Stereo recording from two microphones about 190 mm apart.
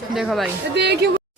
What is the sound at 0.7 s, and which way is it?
Speech, 60° right (ahead or behind).